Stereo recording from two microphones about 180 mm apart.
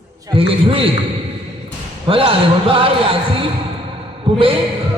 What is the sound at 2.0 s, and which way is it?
A man's voice, 30° right (ahead or behind).